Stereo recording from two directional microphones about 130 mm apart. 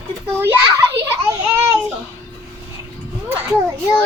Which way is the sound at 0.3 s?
20° right (ahead or behind).